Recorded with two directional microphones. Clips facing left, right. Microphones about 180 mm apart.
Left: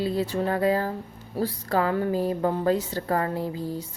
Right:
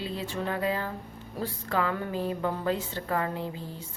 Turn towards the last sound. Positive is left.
turn(degrees=40)  # may be behind; listen again after turning